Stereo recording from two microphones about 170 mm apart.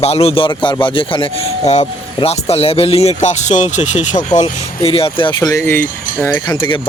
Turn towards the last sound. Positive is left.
turn(degrees=15)  # may be behind; listen again after turning